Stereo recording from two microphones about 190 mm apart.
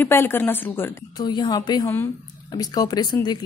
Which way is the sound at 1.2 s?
20° left (ahead or behind).